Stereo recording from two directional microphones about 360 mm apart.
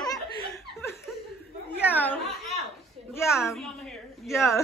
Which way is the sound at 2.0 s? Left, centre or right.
Centre.